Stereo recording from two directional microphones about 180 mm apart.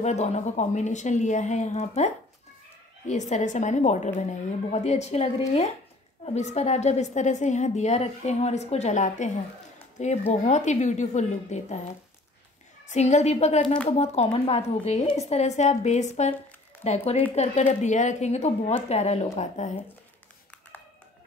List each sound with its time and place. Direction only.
0.0 s a woman's voice: 40° left (ahead or behind)
12.8 s a woman's voice: 40° left (ahead or behind)